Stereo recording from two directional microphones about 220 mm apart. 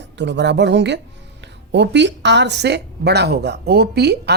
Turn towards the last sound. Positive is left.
turn(degrees=-50)  # may be behind; listen again after turning